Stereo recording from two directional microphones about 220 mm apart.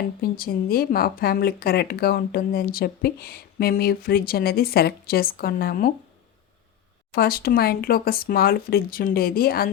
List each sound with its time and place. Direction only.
0.2 s speech: 45° left (ahead or behind)
7.1 s speech: 45° left (ahead or behind)